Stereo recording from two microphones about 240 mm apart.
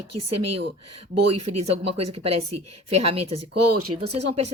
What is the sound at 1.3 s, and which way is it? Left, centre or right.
Speech, right.